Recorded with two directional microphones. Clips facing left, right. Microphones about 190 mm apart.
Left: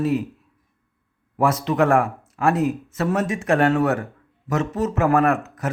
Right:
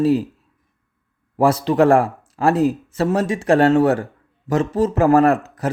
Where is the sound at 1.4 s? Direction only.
30° right (ahead or behind).